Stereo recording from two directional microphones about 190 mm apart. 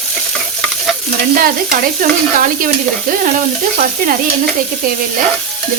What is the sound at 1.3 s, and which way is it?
Speech, 50° right (ahead or behind).